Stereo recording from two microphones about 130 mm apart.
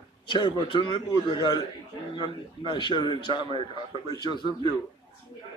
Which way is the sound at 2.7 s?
40° left (ahead or behind).